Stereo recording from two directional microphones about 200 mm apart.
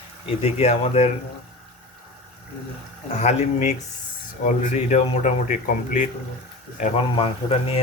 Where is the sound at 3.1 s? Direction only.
35° left (ahead or behind).